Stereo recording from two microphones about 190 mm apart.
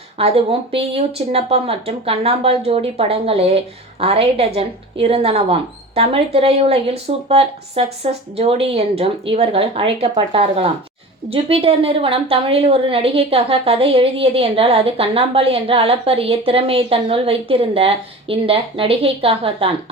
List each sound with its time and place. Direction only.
0.2 s a woman's voice: 30° right (ahead or behind)